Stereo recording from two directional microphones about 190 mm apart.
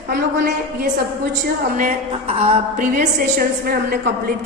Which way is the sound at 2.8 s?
45° right (ahead or behind).